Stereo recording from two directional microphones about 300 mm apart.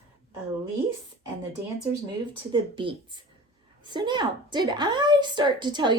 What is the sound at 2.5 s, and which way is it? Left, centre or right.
A woman's voice, centre.